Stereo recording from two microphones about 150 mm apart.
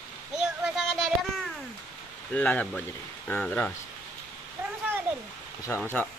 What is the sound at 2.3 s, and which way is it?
Speech, 10° left (ahead or behind).